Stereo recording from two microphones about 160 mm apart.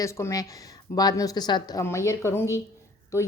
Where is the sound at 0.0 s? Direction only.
20° left (ahead or behind).